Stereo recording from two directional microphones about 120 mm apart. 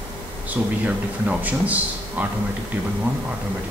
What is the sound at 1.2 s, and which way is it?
Speech, 10° right (ahead or behind).